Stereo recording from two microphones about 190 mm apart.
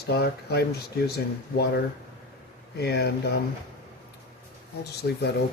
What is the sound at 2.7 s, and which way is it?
Speech, 60° left (ahead or behind).